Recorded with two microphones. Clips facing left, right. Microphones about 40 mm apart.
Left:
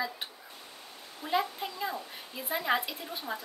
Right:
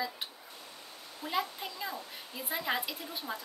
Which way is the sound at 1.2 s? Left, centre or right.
Left.